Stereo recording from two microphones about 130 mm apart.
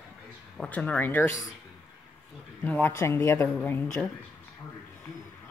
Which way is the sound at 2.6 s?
15° left (ahead or behind).